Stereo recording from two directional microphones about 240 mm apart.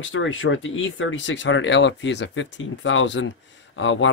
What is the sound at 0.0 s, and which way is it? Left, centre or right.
Speech, left.